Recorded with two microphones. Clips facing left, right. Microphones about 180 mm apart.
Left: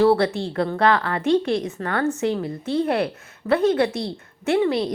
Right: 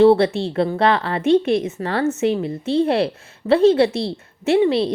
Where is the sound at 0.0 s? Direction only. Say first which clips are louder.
Right 4 dB; 25° right (ahead or behind).